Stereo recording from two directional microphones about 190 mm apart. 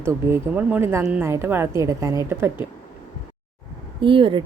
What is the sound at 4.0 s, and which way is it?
Speech, 25° right (ahead or behind).